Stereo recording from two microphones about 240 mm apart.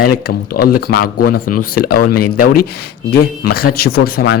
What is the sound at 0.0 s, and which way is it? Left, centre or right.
Speech, left.